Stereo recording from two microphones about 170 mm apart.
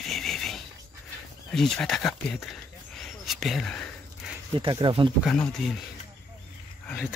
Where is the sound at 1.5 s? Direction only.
5° left (ahead or behind).